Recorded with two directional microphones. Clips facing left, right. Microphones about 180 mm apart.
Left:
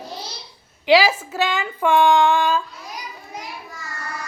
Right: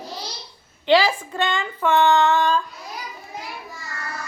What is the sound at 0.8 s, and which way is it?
Speech, 10° left (ahead or behind).